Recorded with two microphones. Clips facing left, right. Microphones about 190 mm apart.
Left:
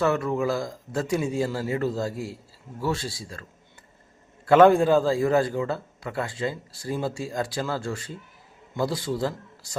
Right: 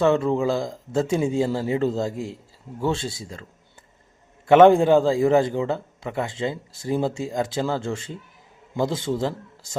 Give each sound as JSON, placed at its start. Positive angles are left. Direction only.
{"t": 0.0, "sound": "a man's voice", "side_deg": -25}
{"t": 4.4, "sound": "a man's voice", "side_deg": -20}